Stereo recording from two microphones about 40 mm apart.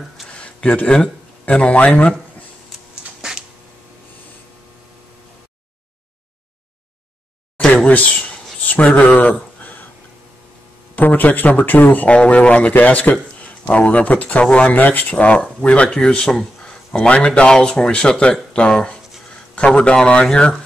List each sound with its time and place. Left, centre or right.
0.7 s speech: left
1.4 s speech: left
3.2 s a sound: centre
7.8 s a sound: left
8.1 s speech: left
11.0 s speech: left
12.1 s speech: left
14.4 s speech: left
14.7 s speech: left
15.9 s speech: centre
17.5 s speech: centre